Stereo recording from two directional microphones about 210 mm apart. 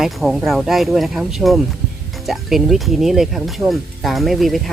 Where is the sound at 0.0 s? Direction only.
Centre (ahead or behind).